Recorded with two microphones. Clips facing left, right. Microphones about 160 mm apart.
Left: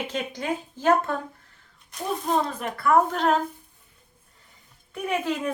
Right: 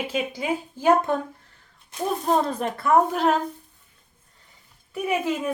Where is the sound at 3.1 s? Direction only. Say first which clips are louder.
Right 1 dB; 5° right (ahead or behind).